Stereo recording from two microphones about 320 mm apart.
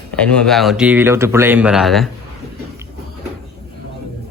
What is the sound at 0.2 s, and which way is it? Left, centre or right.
Speech, centre.